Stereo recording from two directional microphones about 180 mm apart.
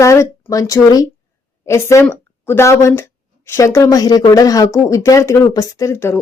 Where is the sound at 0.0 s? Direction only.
15° left (ahead or behind).